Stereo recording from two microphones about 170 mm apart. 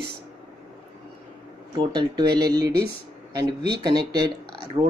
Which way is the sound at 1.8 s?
25° right (ahead or behind).